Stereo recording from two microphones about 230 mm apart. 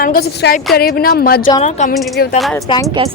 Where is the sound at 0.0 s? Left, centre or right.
Left.